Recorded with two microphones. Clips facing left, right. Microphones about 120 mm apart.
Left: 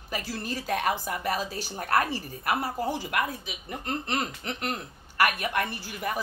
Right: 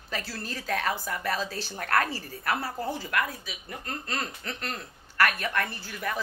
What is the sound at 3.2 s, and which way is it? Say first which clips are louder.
A woman's voice: left 2 dB; 25° left (ahead or behind).